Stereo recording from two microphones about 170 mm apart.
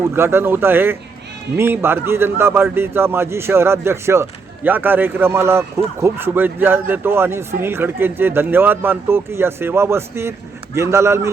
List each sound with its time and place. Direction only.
0.1 s a man's voice: 15° right (ahead or behind)